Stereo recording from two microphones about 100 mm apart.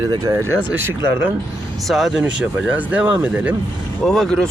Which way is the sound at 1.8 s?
Centre (ahead or behind).